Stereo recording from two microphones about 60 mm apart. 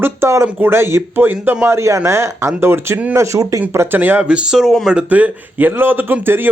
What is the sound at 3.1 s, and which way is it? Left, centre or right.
Speech, right.